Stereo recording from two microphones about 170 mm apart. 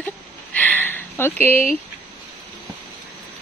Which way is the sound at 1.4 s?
40° right (ahead or behind).